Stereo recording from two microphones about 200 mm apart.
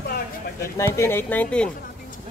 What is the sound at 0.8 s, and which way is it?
Speech, 10° left (ahead or behind).